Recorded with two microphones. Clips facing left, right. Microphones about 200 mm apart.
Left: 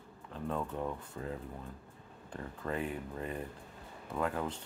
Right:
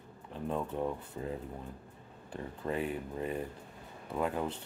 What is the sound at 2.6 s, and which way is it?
Speech, 20° right (ahead or behind).